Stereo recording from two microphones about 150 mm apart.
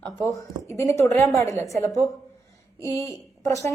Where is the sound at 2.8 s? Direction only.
20° left (ahead or behind).